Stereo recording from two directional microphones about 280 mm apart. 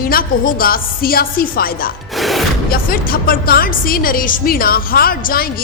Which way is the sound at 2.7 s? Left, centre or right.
Left.